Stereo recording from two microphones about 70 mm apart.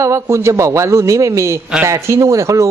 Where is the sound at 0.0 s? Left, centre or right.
Right.